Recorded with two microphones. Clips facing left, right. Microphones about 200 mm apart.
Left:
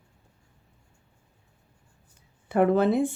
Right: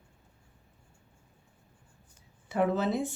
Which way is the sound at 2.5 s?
55° left (ahead or behind).